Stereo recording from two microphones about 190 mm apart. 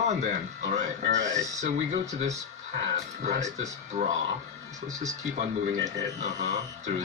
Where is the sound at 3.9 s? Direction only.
35° right (ahead or behind).